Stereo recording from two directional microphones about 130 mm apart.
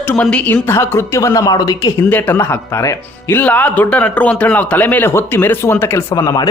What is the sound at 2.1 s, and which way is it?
Speech, 15° left (ahead or behind).